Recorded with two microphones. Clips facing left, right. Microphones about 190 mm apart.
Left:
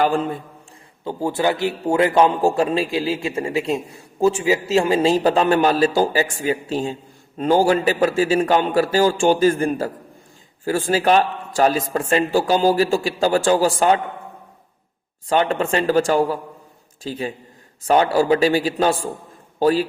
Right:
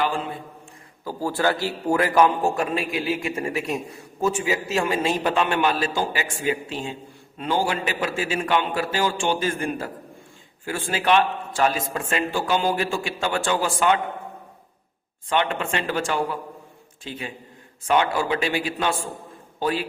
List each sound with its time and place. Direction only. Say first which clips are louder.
0.0 s a man's voice: left 6 dB; 45° left (ahead or behind)
1.0 s a man's voice: left 3 dB; 20° left (ahead or behind); by 14.0 s 40° left (ahead or behind)
15.3 s a man's voice: left 5 dB; 35° left (ahead or behind)